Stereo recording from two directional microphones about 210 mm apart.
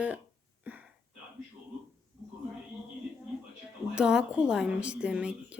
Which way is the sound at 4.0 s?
5° right (ahead or behind).